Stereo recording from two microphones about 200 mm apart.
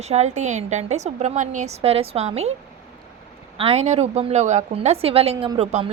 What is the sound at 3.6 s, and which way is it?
A woman's voice, 30° right (ahead or behind).